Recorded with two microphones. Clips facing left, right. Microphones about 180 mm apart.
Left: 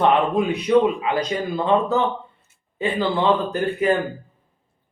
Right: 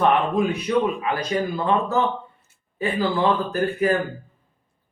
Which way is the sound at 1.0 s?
20° left (ahead or behind).